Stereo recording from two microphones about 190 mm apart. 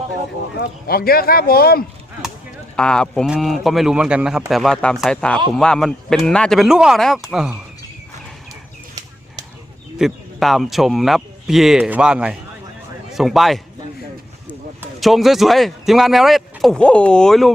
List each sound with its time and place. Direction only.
0.6 s speech: 50° left (ahead or behind)
2.7 s speech: 5° left (ahead or behind)
10.0 s a man's voice: centre (ahead or behind)